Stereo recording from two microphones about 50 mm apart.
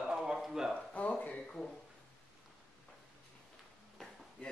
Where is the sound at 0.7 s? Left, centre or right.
Left.